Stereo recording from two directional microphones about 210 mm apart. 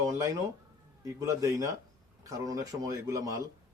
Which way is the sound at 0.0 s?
15° right (ahead or behind).